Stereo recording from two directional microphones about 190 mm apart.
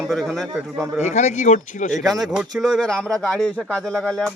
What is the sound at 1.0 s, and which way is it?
Speech, 35° left (ahead or behind).